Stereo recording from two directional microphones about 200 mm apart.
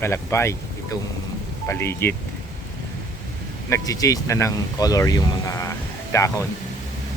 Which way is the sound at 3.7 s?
15° left (ahead or behind).